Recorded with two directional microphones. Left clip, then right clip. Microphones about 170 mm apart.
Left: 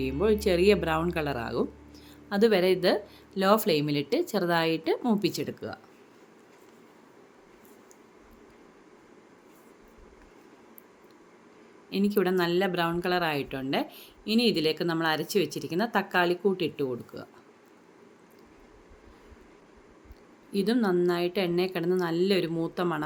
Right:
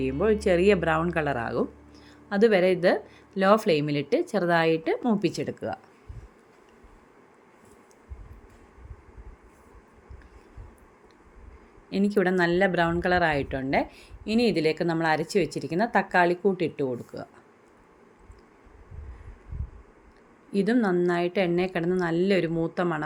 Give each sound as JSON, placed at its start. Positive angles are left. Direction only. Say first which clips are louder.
{"t": 0.0, "sound": "speech", "louder": "right 2 dB", "side_deg": -10}
{"t": 11.9, "sound": "speech", "louder": "right 2 dB", "side_deg": -20}
{"t": 20.5, "sound": "speech", "louder": "right 2 dB", "side_deg": -20}